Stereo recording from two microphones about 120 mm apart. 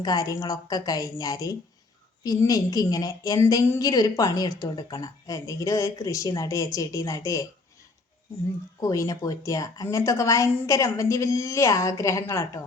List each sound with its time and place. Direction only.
0.0 s a woman's voice: 30° left (ahead or behind)
8.8 s a woman's voice: 30° left (ahead or behind)